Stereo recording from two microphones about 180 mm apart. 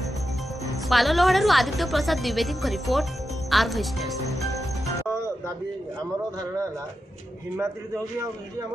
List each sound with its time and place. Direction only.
0.8 s a woman's voice: centre (ahead or behind)
5.0 s music: 15° right (ahead or behind)
7.5 s a man's voice: 15° right (ahead or behind)